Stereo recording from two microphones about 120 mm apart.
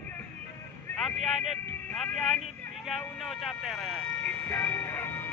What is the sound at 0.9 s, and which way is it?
Speech, centre (ahead or behind).